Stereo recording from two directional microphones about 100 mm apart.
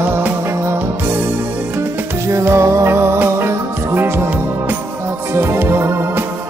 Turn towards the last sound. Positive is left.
turn(degrees=-25)  # may be behind; listen again after turning